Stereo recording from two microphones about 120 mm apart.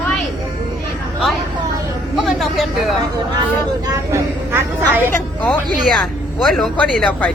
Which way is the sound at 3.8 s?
20° right (ahead or behind).